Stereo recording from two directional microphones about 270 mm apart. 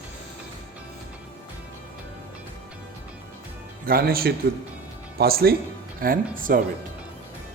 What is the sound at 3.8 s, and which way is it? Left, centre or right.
Speech, right.